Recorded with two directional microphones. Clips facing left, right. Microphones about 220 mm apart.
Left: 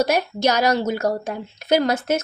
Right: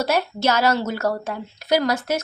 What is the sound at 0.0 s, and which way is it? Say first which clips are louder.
A woman's voice: left 2 dB; 15° left (ahead or behind).